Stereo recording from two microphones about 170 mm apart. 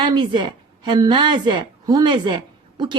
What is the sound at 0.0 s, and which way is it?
A woman's voice, 25° right (ahead or behind).